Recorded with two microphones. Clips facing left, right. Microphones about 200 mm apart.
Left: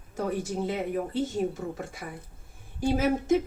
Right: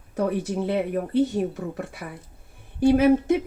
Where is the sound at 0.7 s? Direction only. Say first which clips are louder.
Right 5 dB; 60° right (ahead or behind).